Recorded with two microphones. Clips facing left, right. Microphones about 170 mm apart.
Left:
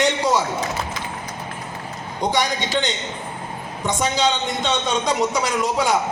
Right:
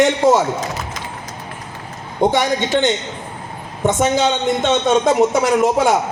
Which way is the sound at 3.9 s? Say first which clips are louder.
Right 3 dB; 50° right (ahead or behind).